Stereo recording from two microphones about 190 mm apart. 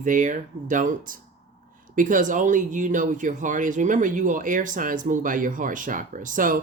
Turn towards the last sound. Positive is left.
turn(degrees=-45)  # may be behind; listen again after turning